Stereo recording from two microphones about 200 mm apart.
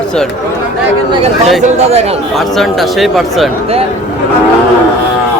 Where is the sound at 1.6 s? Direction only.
35° right (ahead or behind).